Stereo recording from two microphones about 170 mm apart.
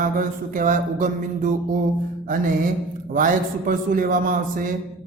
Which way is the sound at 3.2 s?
50° right (ahead or behind).